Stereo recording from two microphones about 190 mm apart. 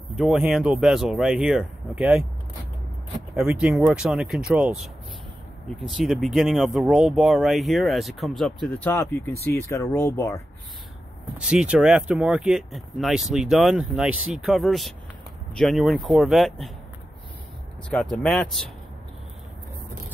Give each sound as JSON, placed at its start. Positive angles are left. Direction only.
{"t": 0.1, "sound": "speech", "side_deg": 0}
{"t": 3.3, "sound": "speech", "side_deg": -5}
{"t": 5.8, "sound": "speech", "side_deg": 0}
{"t": 11.3, "sound": "speech", "side_deg": -5}
{"t": 17.8, "sound": "speech", "side_deg": 5}